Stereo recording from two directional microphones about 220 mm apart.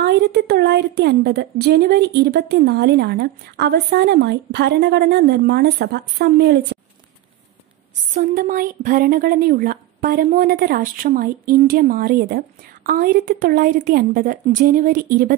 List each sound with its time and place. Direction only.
0.0 s speech: 50° right (ahead or behind)
8.1 s a woman's voice: 40° right (ahead or behind)